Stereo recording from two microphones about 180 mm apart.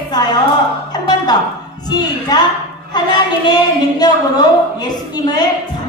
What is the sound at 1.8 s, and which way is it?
A woman's voice, 20° left (ahead or behind).